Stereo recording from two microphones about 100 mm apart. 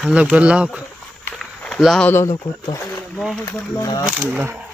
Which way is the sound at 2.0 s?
25° left (ahead or behind).